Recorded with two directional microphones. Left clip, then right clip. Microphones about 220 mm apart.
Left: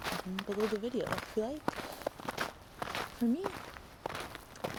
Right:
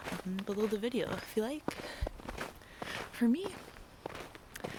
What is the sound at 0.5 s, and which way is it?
Speech, 50° left (ahead or behind).